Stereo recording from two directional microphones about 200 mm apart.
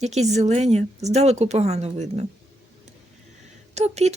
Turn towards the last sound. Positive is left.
turn(degrees=-35)  # may be behind; listen again after turning